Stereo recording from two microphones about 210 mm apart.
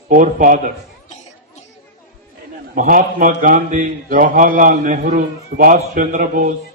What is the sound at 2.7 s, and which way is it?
A man's voice, 40° right (ahead or behind).